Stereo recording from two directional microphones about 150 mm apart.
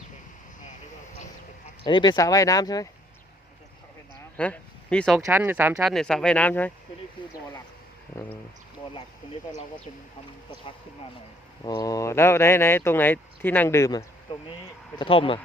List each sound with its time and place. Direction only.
1.8 s speech: 30° left (ahead or behind)
4.4 s speech: 10° left (ahead or behind)
5.2 s speech: 15° right (ahead or behind)
5.8 s speech: 5° left (ahead or behind)
7.2 s a sound: 30° left (ahead or behind)
11.6 s speech: 25° left (ahead or behind)
14.9 s speech: 35° left (ahead or behind)